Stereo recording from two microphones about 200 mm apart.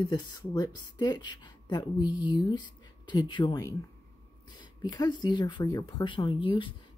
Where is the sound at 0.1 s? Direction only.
20° left (ahead or behind).